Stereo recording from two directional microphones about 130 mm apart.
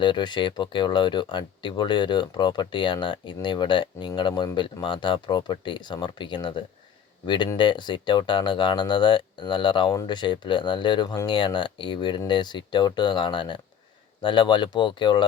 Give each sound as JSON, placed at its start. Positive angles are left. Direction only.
{"t": 0.0, "sound": "speech", "side_deg": 35}